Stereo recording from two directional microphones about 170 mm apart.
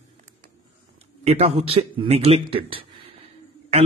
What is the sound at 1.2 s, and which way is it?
A man's voice, 35° right (ahead or behind).